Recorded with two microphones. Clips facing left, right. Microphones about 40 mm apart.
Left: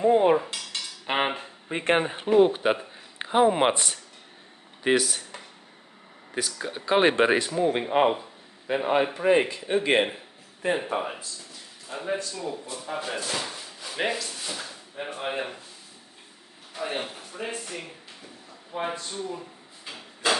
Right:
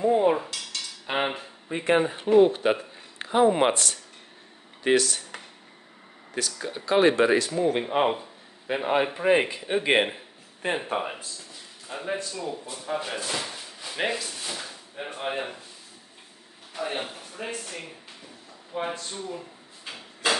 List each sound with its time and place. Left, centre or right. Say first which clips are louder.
0.0 s speech: left 2 dB; left
2.3 s speech: right 1 dB; centre
6.3 s speech: even; centre
7.0 s speech: right 1 dB; left
7.5 s a man's voice: left 1 dB; centre
10.6 s speech: left 2 dB; right
11.9 s a man's voice: left 1 dB; centre
16.7 s speech: even; centre
19.0 s speech: left 1 dB; centre